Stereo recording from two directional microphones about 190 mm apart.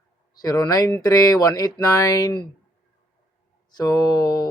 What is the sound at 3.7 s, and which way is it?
Speech, 20° left (ahead or behind).